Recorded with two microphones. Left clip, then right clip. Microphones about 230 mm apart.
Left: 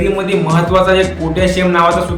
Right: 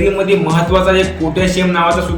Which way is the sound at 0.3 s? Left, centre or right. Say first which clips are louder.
Right 1 dB; centre.